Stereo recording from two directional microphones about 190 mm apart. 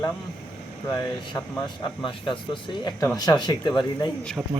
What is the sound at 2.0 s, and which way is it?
Speech, 25° left (ahead or behind).